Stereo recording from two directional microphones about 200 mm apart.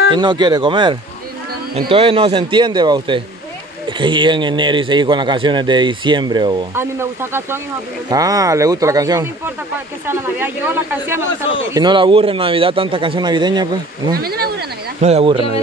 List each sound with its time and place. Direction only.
0.1 s a man's voice: 20° right (ahead or behind)
11.7 s a man's voice: 20° right (ahead or behind)
14.1 s speech: 50° right (ahead or behind)
15.0 s speech: 30° right (ahead or behind)